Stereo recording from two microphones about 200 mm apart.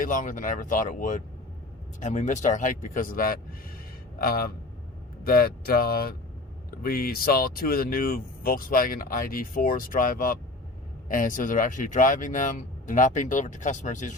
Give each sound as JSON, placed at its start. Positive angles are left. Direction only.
{"t": 0.0, "sound": "speech", "side_deg": 40}